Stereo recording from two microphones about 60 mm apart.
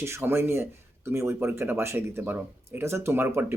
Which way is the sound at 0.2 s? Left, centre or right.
Right.